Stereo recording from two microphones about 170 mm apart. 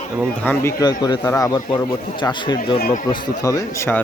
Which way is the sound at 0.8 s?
25° left (ahead or behind).